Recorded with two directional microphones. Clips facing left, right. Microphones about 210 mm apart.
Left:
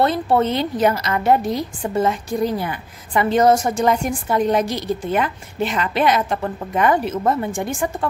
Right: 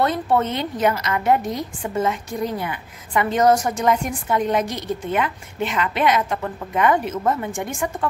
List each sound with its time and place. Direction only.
0.0 s a woman's voice: 30° left (ahead or behind)